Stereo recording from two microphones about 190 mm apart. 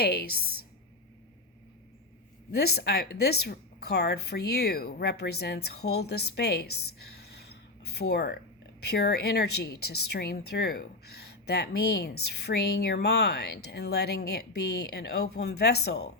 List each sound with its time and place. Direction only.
0.0 s a woman's voice: 55° left (ahead or behind)
2.5 s a woman's voice: 55° left (ahead or behind)